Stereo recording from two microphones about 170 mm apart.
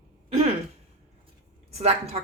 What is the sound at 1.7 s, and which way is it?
Speech, 40° right (ahead or behind).